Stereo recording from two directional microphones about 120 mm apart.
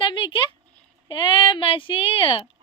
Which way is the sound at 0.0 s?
45° left (ahead or behind).